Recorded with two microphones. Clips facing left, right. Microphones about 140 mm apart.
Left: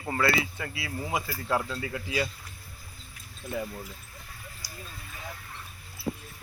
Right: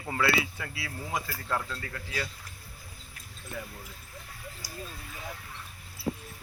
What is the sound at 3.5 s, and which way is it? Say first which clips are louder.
Speech: left 7 dB; 20° left (ahead or behind).